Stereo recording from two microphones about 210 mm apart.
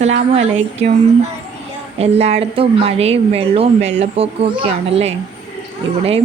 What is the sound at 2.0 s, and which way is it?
A woman's voice, 30° right (ahead or behind).